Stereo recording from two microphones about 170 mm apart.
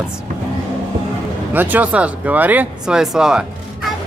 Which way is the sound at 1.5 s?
10° right (ahead or behind).